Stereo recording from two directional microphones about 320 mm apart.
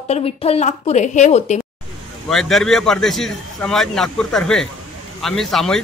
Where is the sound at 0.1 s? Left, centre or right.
Centre.